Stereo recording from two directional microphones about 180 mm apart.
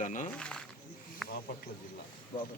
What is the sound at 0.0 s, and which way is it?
Speech, 45° left (ahead or behind).